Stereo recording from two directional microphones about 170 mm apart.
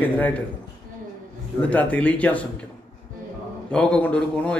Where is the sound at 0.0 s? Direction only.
10° left (ahead or behind).